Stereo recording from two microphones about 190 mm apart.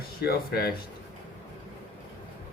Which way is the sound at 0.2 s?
55° left (ahead or behind).